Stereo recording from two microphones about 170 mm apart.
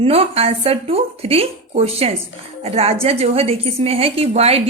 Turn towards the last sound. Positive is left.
turn(degrees=-35)  # may be behind; listen again after turning